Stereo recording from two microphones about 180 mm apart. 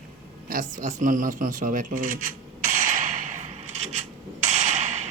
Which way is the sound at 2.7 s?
50° right (ahead or behind).